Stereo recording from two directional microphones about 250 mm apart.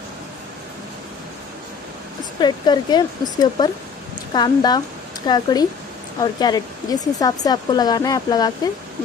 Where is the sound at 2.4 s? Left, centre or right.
Centre.